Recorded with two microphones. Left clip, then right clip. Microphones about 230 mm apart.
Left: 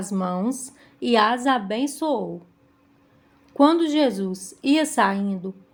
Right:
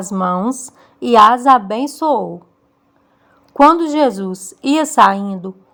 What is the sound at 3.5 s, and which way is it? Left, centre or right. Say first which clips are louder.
A woman's voice: right 8 dB; right.